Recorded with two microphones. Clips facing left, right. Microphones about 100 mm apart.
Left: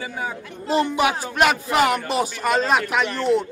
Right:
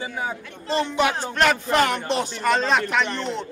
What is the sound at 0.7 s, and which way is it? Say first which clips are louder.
Speech: left 2 dB; 10° left (ahead or behind).